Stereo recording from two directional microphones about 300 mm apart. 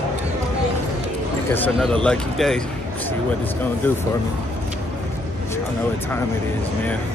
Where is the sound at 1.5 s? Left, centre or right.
Centre.